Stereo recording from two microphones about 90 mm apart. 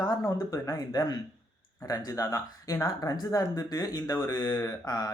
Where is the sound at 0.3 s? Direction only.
40° left (ahead or behind).